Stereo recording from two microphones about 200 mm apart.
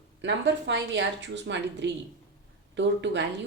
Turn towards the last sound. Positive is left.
turn(degrees=-60)  # may be behind; listen again after turning